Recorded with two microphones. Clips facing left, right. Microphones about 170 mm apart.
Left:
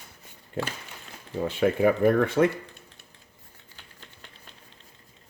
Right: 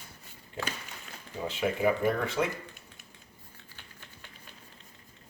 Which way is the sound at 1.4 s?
55° left (ahead or behind).